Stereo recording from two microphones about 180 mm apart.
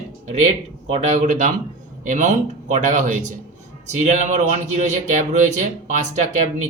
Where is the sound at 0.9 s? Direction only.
35° right (ahead or behind).